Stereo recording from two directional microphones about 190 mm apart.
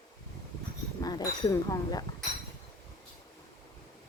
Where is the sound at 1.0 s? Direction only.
20° left (ahead or behind).